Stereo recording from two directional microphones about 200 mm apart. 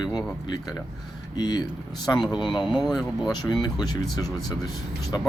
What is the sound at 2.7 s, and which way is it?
Speech, centre (ahead or behind).